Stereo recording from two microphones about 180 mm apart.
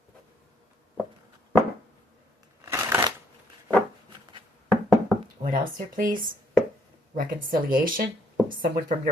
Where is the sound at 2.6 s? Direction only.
15° right (ahead or behind).